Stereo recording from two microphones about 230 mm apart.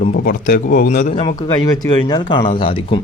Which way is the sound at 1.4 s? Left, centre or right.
Centre.